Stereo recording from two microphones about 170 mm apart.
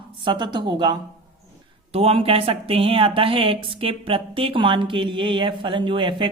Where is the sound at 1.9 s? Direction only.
35° right (ahead or behind).